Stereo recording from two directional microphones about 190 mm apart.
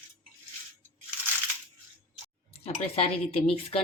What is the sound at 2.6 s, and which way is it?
Speech, 30° left (ahead or behind).